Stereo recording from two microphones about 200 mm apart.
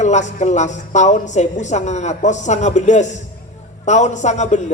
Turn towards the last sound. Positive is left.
turn(degrees=35)  # may be behind; listen again after turning